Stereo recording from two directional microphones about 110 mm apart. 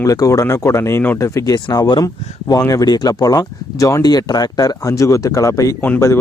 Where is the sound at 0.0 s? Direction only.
30° left (ahead or behind).